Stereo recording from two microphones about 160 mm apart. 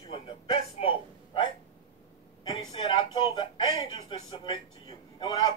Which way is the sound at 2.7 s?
30° left (ahead or behind).